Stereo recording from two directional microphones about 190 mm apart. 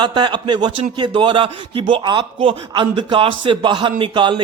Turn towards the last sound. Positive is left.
turn(degrees=-25)  # may be behind; listen again after turning